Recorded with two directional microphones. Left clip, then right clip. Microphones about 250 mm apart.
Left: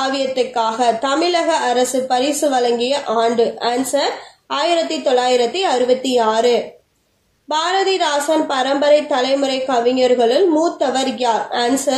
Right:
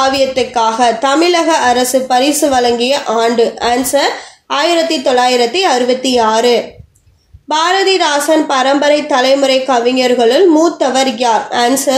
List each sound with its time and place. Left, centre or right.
0.0 s a woman's voice: right